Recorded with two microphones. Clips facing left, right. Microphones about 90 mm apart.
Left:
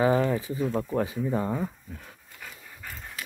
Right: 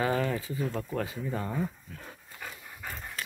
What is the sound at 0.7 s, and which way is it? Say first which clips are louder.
Speech: left 6 dB; 20° left (ahead or behind).